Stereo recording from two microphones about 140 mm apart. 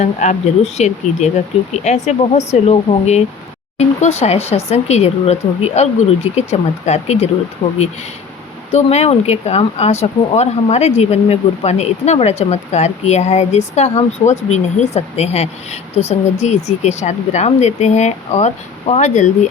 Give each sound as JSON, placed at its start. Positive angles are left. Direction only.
{"t": 0.0, "sound": "speech", "side_deg": 55}
{"t": 7.6, "sound": "speech", "side_deg": 35}
{"t": 8.7, "sound": "speech", "side_deg": 50}